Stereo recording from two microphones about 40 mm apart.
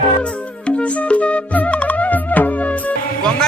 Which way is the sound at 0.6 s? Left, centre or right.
Left.